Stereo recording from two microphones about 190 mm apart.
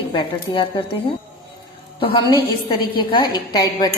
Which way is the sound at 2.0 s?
30° left (ahead or behind).